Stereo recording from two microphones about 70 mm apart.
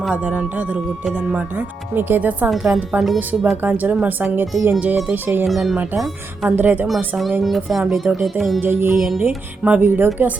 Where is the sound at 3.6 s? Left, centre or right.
Right.